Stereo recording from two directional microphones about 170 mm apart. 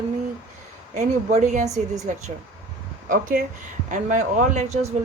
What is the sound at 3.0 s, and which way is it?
Speech, 55° right (ahead or behind).